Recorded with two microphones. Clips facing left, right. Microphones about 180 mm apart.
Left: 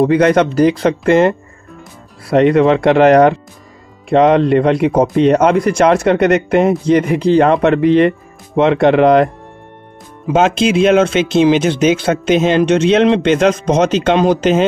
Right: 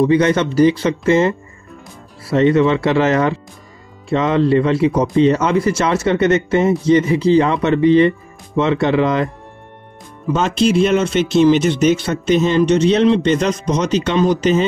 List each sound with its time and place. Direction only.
0.0 s speech: 60° left (ahead or behind)
2.3 s speech: 60° left (ahead or behind)
4.6 s speech: 55° left (ahead or behind)
10.2 s speech: 90° left